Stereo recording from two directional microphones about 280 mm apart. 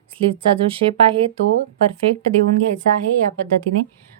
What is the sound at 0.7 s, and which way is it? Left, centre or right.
Speech, centre.